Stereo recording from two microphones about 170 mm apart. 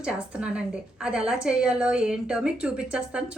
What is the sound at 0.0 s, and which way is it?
A woman's voice, 5° right (ahead or behind).